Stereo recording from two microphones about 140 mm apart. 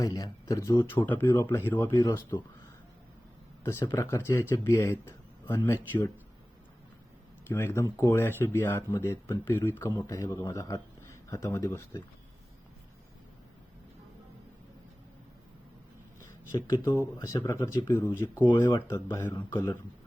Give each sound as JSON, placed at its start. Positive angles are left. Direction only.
{"t": 0.0, "sound": "speech", "side_deg": 25}
{"t": 3.6, "sound": "speech", "side_deg": 15}
{"t": 7.4, "sound": "a man's voice", "side_deg": 15}
{"t": 16.5, "sound": "speech", "side_deg": 25}
{"t": 17.6, "sound": "speech", "side_deg": 30}
{"t": 17.8, "sound": "speech", "side_deg": 20}